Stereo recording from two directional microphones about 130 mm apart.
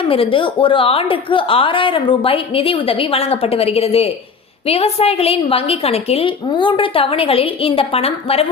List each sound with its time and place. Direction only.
0.0 s a woman's voice: 45° left (ahead or behind)